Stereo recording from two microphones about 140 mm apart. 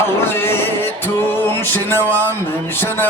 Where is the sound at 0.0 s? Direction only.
15° left (ahead or behind).